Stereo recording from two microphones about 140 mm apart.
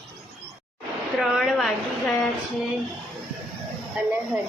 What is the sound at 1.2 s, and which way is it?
Speech, centre (ahead or behind).